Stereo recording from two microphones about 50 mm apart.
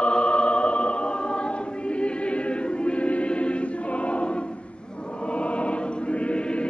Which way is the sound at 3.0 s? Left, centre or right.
Left.